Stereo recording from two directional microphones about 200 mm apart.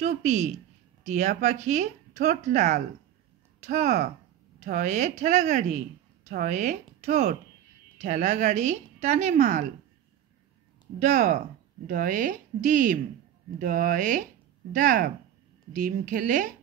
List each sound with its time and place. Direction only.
0.0 s a woman's voice: 35° right (ahead or behind)
11.0 s speech: 35° right (ahead or behind)